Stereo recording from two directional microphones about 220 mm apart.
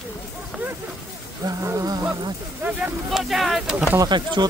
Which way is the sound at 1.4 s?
15° right (ahead or behind).